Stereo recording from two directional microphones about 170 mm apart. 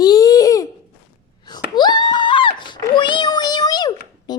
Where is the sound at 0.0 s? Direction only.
20° left (ahead or behind).